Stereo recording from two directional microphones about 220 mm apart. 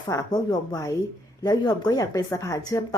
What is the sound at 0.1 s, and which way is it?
A woman's voice, 15° left (ahead or behind).